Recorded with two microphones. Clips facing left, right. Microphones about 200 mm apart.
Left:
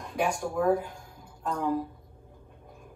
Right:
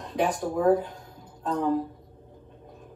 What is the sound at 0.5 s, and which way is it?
Speech, 20° right (ahead or behind).